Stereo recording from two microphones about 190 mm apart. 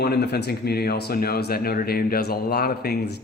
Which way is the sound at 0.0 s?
55° left (ahead or behind).